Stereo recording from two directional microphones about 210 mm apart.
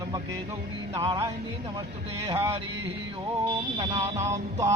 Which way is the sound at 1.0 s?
20° right (ahead or behind).